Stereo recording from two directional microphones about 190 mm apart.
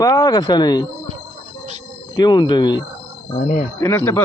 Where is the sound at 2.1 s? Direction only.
20° left (ahead or behind).